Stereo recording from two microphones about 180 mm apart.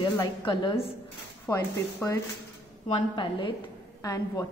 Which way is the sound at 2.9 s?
25° left (ahead or behind).